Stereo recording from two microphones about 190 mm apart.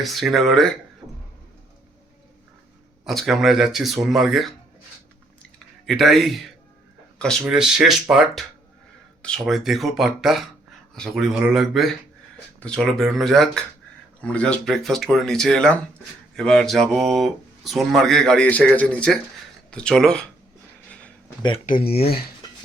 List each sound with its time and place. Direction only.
0.0 s speech: centre (ahead or behind)
3.0 s speech: centre (ahead or behind)
5.4 s clicking: centre (ahead or behind)
7.2 s speech: centre (ahead or behind)
21.7 s speech: 55° left (ahead or behind)